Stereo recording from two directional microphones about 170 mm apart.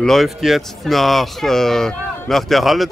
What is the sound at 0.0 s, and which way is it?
Speech, centre (ahead or behind).